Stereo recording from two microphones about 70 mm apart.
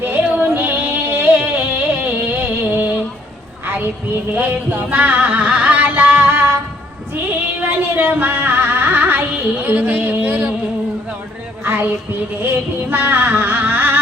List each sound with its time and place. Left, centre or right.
0.0 s music: right
4.4 s music: right
7.3 s a sound: right
11.6 s speech: right
12.4 s music: right